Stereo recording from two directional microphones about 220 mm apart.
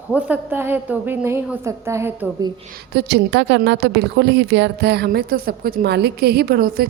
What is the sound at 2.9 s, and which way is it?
A woman's voice, 50° right (ahead or behind).